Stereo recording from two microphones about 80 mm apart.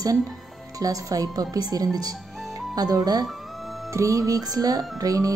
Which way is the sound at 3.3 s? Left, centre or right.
Centre.